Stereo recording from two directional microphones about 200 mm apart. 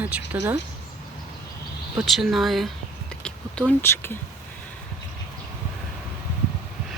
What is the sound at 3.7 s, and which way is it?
Speech, 10° left (ahead or behind).